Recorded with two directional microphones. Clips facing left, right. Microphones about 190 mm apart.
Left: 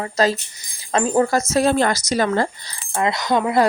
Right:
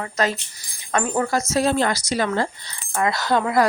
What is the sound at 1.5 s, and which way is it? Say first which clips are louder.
Speech: left 3 dB; 55° left (ahead or behind).